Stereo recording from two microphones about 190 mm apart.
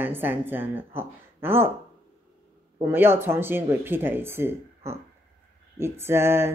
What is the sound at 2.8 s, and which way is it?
A woman's voice, 10° right (ahead or behind).